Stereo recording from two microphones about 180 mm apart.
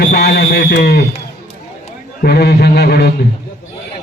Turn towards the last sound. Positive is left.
turn(degrees=65)  # may be behind; listen again after turning